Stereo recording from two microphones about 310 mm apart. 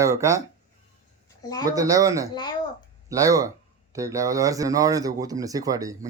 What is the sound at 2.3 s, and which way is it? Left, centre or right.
Speech, centre.